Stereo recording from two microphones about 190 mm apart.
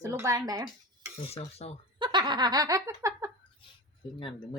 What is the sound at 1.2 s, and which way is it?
Cutlery, 30° left (ahead or behind).